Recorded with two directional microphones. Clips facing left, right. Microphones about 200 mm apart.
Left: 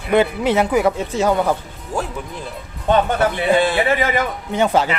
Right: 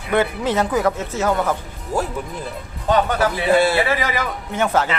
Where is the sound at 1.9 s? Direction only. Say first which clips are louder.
Right 1 dB; centre (ahead or behind).